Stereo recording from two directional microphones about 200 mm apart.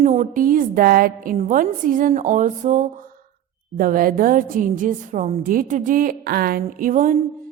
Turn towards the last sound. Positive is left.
turn(degrees=-40)  # may be behind; listen again after turning